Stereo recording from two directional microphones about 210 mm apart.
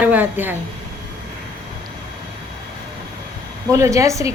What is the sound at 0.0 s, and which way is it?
Speech, 10° right (ahead or behind).